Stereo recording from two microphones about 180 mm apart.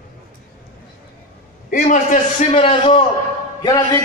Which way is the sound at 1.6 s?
45° left (ahead or behind).